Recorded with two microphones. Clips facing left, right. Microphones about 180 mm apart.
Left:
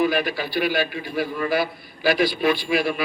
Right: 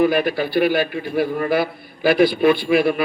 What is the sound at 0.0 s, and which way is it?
A man's voice, 55° right (ahead or behind).